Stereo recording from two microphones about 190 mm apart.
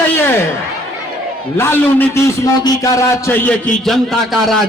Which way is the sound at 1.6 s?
10° left (ahead or behind).